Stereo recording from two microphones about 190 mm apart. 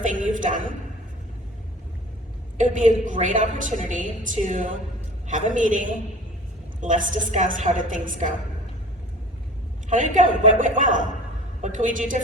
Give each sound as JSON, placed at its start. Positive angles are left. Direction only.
{"t": 0.0, "sound": "a man's voice", "side_deg": -45}
{"t": 2.6, "sound": "a woman's voice", "side_deg": -40}
{"t": 9.9, "sound": "a woman's voice", "side_deg": -40}